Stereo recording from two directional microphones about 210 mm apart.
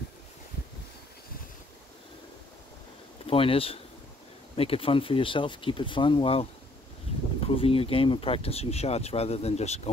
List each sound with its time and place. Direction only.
3.3 s speech: 25° left (ahead or behind)